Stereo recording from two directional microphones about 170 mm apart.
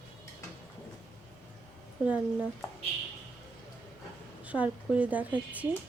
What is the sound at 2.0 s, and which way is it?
Speech, 5° right (ahead or behind).